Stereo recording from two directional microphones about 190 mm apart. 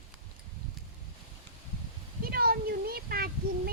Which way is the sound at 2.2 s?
50° right (ahead or behind).